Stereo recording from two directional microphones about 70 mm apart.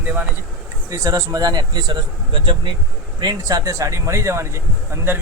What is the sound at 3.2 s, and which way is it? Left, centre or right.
Speech, right.